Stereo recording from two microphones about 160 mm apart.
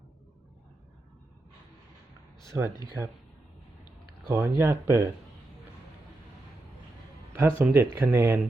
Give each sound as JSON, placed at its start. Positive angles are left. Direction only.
{"t": 2.5, "sound": "speech", "side_deg": -10}
{"t": 4.3, "sound": "speech", "side_deg": -15}
{"t": 7.3, "sound": "speech", "side_deg": -15}